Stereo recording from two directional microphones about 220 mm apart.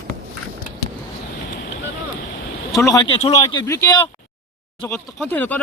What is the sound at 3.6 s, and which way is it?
Speech, 15° left (ahead or behind).